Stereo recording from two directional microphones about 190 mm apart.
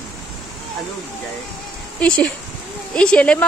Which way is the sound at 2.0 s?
5° left (ahead or behind).